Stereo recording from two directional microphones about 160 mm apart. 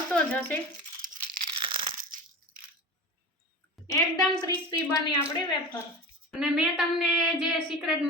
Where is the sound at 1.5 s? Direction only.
35° right (ahead or behind).